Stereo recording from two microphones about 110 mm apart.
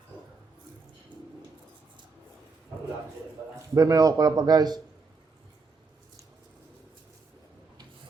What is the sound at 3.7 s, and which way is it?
Speech, 30° right (ahead or behind).